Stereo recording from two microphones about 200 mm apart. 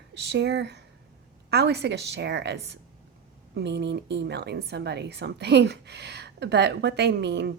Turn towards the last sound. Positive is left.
turn(degrees=-60)  # may be behind; listen again after turning